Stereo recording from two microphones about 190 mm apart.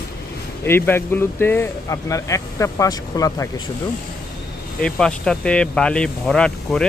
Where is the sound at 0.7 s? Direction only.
10° left (ahead or behind).